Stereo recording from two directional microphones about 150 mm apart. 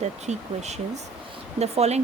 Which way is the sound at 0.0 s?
50° right (ahead or behind).